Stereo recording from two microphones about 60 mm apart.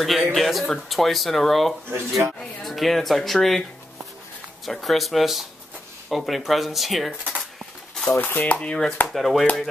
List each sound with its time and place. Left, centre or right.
0.0 s speech: centre
1.9 s speech: right
2.6 s speech: centre
8.1 s a sound: left
8.5 s chopping: centre
9.0 s speech: centre